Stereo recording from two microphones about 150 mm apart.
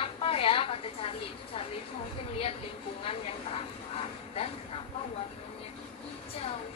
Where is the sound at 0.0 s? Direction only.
40° left (ahead or behind).